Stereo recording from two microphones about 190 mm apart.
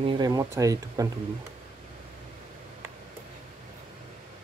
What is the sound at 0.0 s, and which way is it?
Speech, 25° right (ahead or behind).